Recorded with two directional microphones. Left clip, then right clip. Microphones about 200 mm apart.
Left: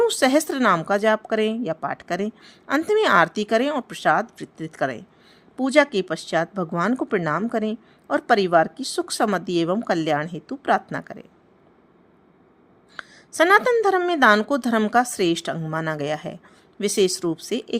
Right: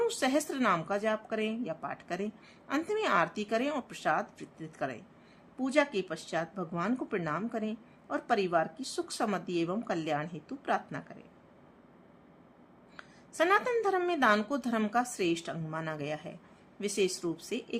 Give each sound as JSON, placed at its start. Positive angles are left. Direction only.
{"t": 0.0, "sound": "speech", "side_deg": 40}
{"t": 13.0, "sound": "speech", "side_deg": 40}